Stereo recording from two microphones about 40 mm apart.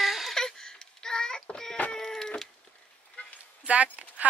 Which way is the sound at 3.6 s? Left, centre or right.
Right.